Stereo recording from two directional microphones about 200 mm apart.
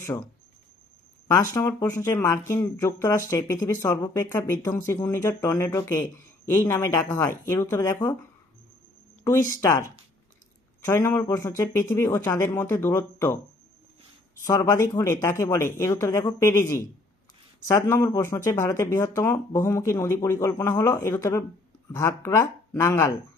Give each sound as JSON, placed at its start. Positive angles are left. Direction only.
{"t": 0.0, "sound": "speech", "side_deg": 15}
{"t": 1.3, "sound": "speech", "side_deg": 15}
{"t": 9.2, "sound": "speech", "side_deg": 15}
{"t": 10.8, "sound": "speech", "side_deg": 15}
{"t": 14.4, "sound": "speech", "side_deg": 15}